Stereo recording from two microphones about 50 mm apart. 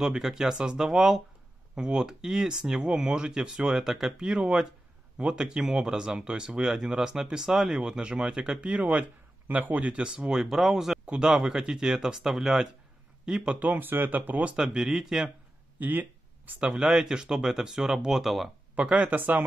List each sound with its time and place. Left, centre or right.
0.0 s speech: centre
8.8 s speech: right
10.3 s speech: centre
13.6 s speech: right
14.5 s speech: centre
15.8 s a sound: right
16.7 s speech: centre
18.8 s speech: right